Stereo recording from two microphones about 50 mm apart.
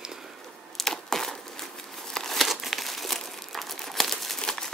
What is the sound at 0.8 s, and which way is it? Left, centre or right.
Crumpling, centre.